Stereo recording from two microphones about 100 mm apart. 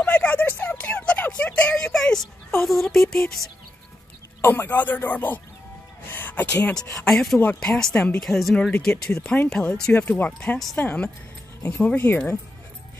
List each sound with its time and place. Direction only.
0.0 s a sound: 10° left (ahead or behind)
2.6 s speech: centre (ahead or behind)
4.4 s speech: 20° left (ahead or behind); by 8.6 s centre (ahead or behind)
8.6 s speech: 10° left (ahead or behind)